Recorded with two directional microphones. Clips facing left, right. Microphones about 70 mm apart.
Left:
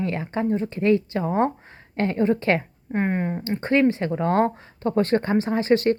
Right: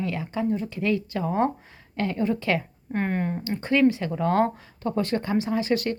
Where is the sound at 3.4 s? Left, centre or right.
Left.